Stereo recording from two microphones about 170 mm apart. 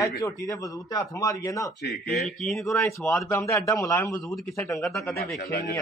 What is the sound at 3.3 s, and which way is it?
A man's voice, 15° left (ahead or behind).